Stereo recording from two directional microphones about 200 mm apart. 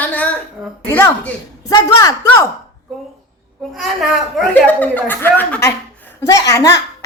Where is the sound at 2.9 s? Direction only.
Centre (ahead or behind).